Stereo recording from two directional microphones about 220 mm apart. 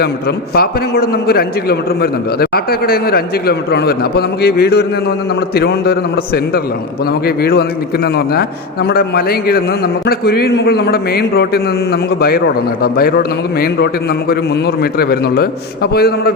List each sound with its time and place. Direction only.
0.0 s a man's voice: 45° left (ahead or behind)